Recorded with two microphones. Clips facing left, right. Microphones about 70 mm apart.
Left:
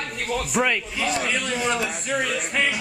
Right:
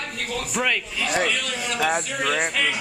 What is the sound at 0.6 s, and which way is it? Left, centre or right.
Speech, centre.